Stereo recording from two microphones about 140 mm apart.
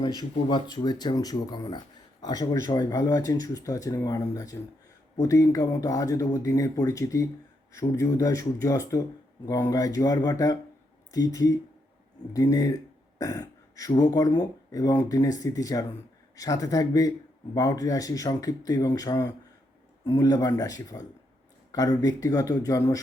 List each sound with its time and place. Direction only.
0.2 s speech: 35° left (ahead or behind)